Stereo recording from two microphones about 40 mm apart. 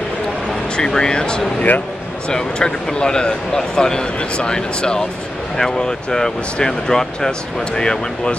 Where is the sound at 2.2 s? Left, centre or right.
Left.